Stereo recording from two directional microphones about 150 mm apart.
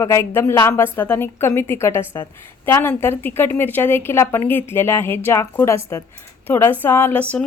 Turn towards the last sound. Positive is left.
turn(degrees=15)  # may be behind; listen again after turning